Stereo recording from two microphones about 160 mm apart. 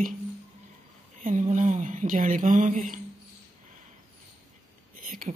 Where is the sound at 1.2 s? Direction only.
50° right (ahead or behind).